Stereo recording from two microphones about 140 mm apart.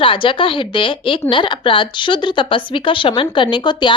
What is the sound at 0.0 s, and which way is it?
Speech, 40° left (ahead or behind).